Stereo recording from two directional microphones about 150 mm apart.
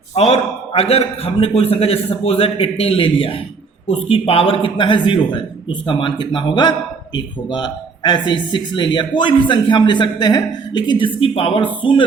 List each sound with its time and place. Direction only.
0.1 s speech: 45° left (ahead or behind)